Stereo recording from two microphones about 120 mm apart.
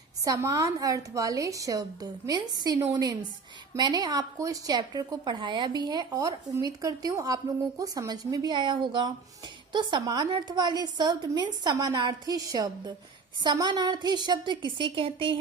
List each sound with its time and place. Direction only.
0.3 s a woman's voice: 30° right (ahead or behind); by 15.4 s 45° right (ahead or behind)